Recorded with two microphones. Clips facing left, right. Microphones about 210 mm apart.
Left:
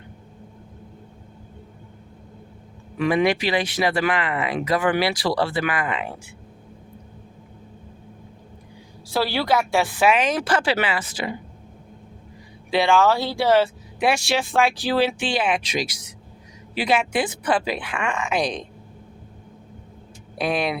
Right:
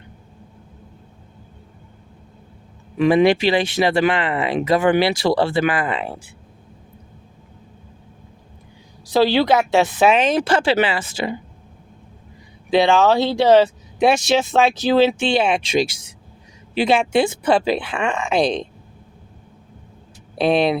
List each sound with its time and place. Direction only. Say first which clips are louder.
3.0 s speech: right 6 dB; 25° right (ahead or behind)
9.0 s speech: right 6 dB; 20° right (ahead or behind)
12.7 s speech: right 4 dB; 20° right (ahead or behind)
20.4 s speech: right 7 dB; 30° right (ahead or behind)